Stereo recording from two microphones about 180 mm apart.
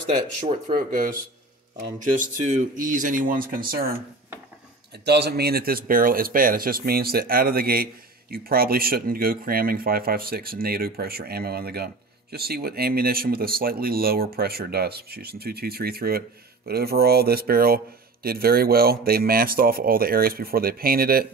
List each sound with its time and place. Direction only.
0.7 s speech: 50° right (ahead or behind)
2.7 s speech: 45° right (ahead or behind)
5.0 s speech: 65° right (ahead or behind)